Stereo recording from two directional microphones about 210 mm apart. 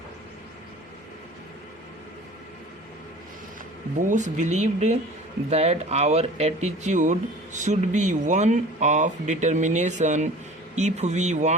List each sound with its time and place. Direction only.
4.1 s speech: 35° right (ahead or behind)